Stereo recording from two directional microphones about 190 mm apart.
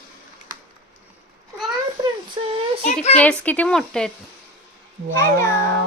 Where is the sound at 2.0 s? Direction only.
25° right (ahead or behind).